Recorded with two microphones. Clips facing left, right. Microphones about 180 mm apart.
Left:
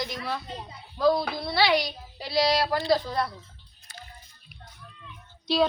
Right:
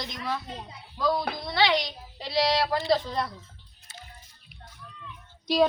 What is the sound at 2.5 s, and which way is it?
Speech, centre (ahead or behind).